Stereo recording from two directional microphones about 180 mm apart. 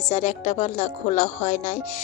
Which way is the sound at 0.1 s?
40° left (ahead or behind).